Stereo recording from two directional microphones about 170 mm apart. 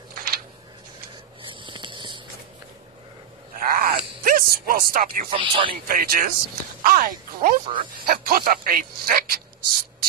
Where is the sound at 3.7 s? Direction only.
55° right (ahead or behind).